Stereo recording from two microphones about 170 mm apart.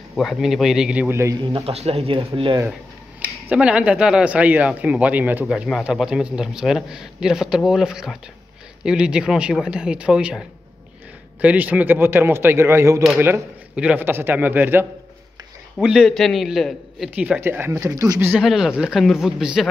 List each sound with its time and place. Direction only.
0.1 s speech: centre (ahead or behind)
1.5 s speech: 35° right (ahead or behind)
3.4 s speech: 5° right (ahead or behind)
11.4 s a man's voice: 10° right (ahead or behind)
18.3 s speech: centre (ahead or behind)